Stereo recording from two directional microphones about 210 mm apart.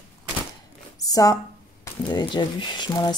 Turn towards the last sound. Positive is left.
turn(degrees=20)  # may be behind; listen again after turning